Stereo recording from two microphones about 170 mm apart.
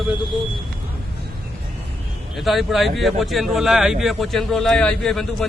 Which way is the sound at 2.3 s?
Centre (ahead or behind).